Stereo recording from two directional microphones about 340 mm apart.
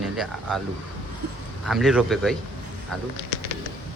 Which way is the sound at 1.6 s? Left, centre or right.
Centre.